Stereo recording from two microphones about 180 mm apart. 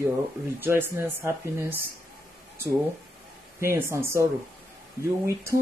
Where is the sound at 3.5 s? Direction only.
15° right (ahead or behind).